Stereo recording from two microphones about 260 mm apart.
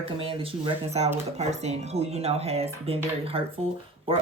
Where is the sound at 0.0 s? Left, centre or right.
Right.